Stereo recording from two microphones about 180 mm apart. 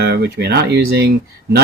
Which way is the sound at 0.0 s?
65° right (ahead or behind).